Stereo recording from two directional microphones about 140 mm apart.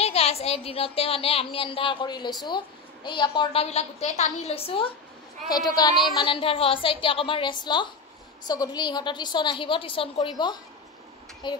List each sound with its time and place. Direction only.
0.0 s a woman's voice: 45° left (ahead or behind)
3.6 s speech: 50° left (ahead or behind)
6.1 s a woman's voice: 35° left (ahead or behind)